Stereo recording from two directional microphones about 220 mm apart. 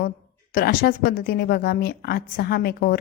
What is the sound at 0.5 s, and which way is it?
Speech, 40° left (ahead or behind).